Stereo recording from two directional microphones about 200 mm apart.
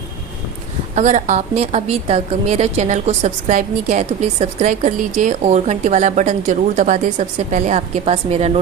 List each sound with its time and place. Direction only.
0.9 s a woman's voice: 35° right (ahead or behind)